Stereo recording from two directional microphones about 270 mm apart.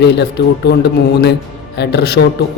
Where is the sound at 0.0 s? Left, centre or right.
Left.